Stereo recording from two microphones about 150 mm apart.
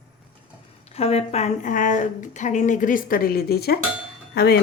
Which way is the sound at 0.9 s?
40° left (ahead or behind).